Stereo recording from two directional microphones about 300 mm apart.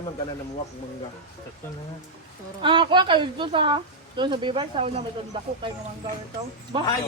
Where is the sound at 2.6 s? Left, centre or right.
Centre.